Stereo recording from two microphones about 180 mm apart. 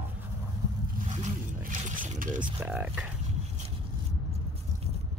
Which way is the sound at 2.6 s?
10° right (ahead or behind).